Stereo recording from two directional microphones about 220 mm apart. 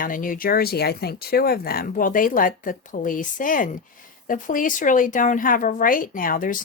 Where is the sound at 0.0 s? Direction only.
40° left (ahead or behind).